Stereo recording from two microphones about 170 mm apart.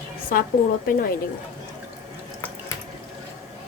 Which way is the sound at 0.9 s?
55° left (ahead or behind).